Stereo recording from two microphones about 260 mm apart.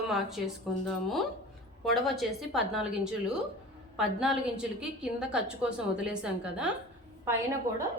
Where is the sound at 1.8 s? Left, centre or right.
Centre.